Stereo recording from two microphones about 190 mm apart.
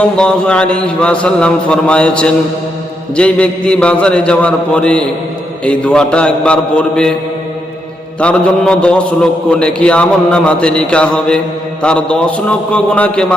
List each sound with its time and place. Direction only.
0.2 s a man's voice: 5° left (ahead or behind)
8.2 s a man's voice: 5° left (ahead or behind)